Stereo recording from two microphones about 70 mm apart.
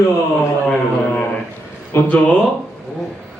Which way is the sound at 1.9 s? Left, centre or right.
Left.